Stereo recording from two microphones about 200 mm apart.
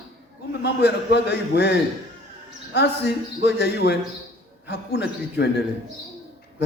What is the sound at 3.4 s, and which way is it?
A man's voice, 55° left (ahead or behind).